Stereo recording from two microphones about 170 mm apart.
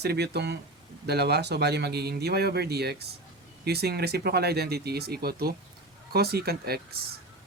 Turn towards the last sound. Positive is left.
turn(degrees=-65)  # may be behind; listen again after turning